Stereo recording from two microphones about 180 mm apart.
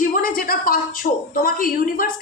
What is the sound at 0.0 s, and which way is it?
A woman's voice, 50° left (ahead or behind).